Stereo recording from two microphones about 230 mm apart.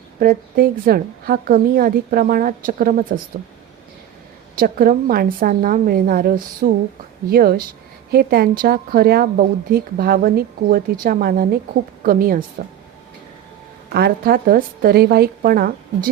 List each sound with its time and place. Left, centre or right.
0.2 s speech: right
4.5 s speech: right
13.9 s speech: right